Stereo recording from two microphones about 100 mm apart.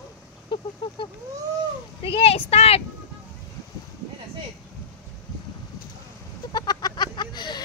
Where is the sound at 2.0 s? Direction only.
75° left (ahead or behind); by 2.8 s 90° left.